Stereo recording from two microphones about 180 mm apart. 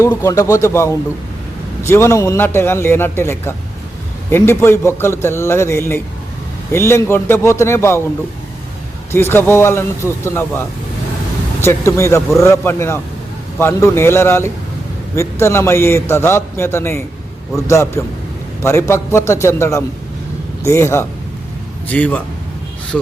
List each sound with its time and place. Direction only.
0.0 s a man's voice: 20° left (ahead or behind)
9.1 s a man's voice: 10° left (ahead or behind)